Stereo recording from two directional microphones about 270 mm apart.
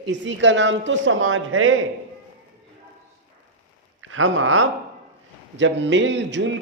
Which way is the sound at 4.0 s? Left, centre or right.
Right.